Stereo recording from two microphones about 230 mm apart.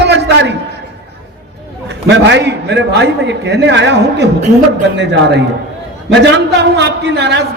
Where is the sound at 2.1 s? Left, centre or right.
Right.